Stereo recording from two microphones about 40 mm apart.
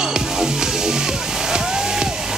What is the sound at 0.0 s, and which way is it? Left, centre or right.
Music, centre.